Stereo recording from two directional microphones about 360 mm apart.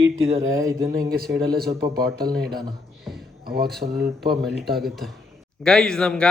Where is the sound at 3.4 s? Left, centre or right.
Right.